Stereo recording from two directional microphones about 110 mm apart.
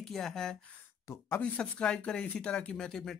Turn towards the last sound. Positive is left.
turn(degrees=5)  # may be behind; listen again after turning